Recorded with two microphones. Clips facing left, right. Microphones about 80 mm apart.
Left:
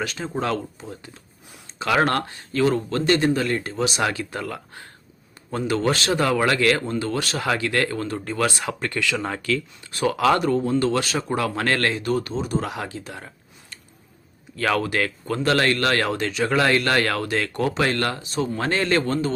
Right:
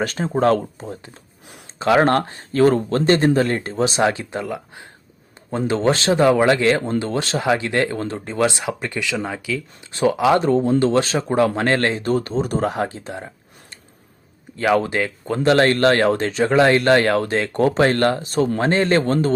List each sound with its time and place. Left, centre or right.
0.0 s speech: right; by 9.9 s centre
9.9 s speech: right
14.8 s speech: right
18.5 s speech: right